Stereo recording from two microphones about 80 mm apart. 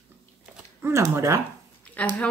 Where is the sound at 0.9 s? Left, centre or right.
Right.